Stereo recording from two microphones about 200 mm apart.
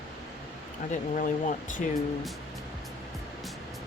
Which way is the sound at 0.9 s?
40° left (ahead or behind).